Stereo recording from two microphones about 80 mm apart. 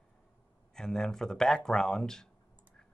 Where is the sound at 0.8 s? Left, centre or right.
Centre.